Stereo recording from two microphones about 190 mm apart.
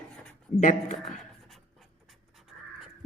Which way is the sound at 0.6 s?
40° left (ahead or behind).